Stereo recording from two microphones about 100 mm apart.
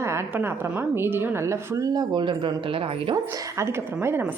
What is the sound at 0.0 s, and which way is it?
A woman's voice, 25° right (ahead or behind).